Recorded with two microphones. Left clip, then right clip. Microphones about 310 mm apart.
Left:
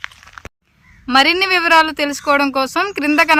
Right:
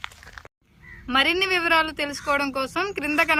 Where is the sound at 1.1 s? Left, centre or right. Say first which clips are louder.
Left 8 dB; centre.